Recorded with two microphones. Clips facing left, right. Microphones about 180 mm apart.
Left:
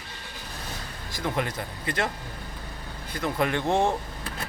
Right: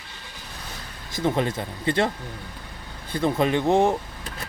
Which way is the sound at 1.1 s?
25° right (ahead or behind).